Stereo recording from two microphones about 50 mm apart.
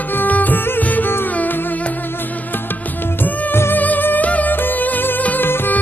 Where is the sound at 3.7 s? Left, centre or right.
Left.